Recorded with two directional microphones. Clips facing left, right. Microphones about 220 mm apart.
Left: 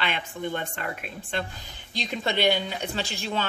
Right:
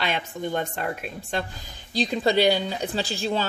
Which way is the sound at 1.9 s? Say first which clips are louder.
Right 7 dB; 35° right (ahead or behind).